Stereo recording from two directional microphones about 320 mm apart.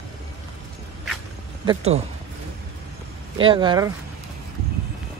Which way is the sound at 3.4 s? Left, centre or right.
Centre.